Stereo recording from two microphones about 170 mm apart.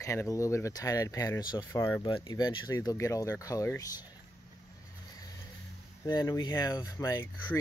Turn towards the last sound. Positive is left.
turn(degrees=20)  # may be behind; listen again after turning